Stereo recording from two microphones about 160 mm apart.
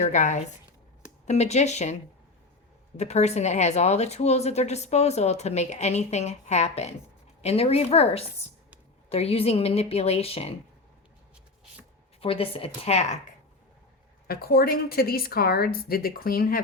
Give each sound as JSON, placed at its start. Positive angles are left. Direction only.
{"t": 0.0, "sound": "a woman's voice", "side_deg": 50}
{"t": 3.0, "sound": "a woman's voice", "side_deg": 45}
{"t": 12.2, "sound": "a woman's voice", "side_deg": 35}
{"t": 14.3, "sound": "a woman's voice", "side_deg": 70}